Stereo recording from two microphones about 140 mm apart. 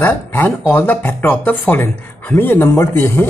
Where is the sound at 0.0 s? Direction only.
15° left (ahead or behind).